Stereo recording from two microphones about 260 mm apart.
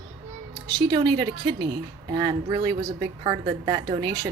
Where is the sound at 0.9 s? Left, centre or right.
Centre.